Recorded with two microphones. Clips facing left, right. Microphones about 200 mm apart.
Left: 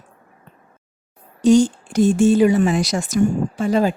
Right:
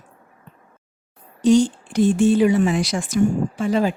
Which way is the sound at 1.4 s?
45° left (ahead or behind).